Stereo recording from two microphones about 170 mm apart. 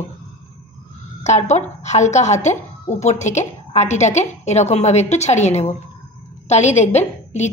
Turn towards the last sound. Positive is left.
turn(degrees=40)  # may be behind; listen again after turning